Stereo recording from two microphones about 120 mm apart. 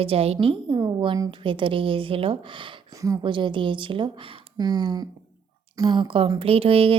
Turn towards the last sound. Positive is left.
turn(degrees=-55)  # may be behind; listen again after turning